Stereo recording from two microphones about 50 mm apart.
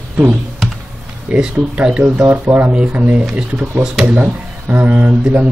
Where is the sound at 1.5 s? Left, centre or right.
Right.